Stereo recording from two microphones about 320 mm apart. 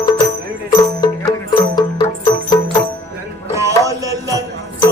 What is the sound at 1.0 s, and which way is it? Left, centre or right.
Music, centre.